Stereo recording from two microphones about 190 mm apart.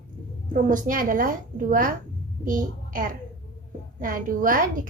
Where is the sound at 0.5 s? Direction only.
45° right (ahead or behind).